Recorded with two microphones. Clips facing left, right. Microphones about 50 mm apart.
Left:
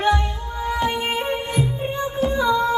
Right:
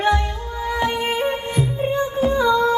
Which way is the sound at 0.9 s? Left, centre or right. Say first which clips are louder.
Right 2 dB; centre.